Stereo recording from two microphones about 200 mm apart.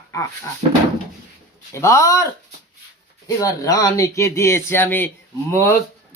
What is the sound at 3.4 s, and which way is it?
Speech, 15° left (ahead or behind).